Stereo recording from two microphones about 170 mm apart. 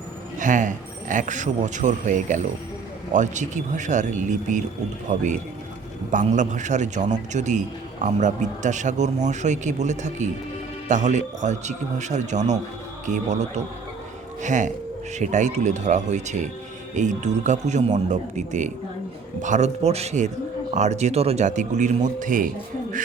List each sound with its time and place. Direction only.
0.3 s speech: 50° right (ahead or behind)